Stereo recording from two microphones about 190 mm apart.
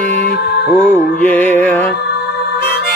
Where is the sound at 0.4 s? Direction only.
60° left (ahead or behind).